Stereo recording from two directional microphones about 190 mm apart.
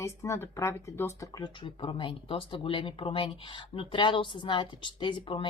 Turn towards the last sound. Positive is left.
turn(degrees=25)  # may be behind; listen again after turning